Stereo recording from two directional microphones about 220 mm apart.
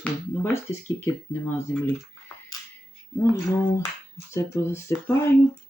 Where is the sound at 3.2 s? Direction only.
15° left (ahead or behind).